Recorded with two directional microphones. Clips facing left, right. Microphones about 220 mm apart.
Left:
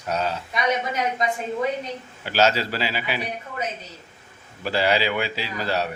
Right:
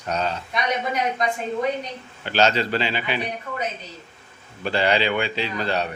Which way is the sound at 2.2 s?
5° left (ahead or behind).